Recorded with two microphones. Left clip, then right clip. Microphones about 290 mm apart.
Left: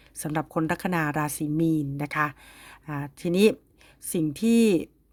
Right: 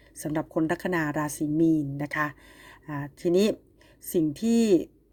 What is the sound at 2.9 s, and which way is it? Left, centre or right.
Speech, left.